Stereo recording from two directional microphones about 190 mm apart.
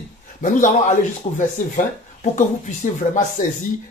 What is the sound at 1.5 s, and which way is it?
Speech, 40° left (ahead or behind).